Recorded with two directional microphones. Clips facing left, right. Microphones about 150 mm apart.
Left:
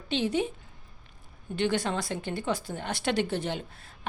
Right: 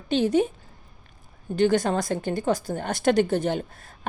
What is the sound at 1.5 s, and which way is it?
A woman's voice, 45° right (ahead or behind).